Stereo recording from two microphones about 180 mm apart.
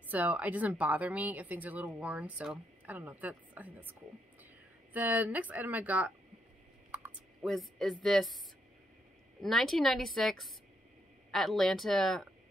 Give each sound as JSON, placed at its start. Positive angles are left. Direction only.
{"t": 0.1, "sound": "a woman's voice", "side_deg": -10}
{"t": 4.9, "sound": "a woman's voice", "side_deg": -10}
{"t": 7.4, "sound": "a woman's voice", "side_deg": 0}
{"t": 9.4, "sound": "a woman's voice", "side_deg": 0}